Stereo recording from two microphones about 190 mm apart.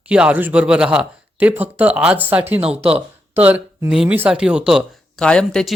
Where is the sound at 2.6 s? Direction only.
30° right (ahead or behind).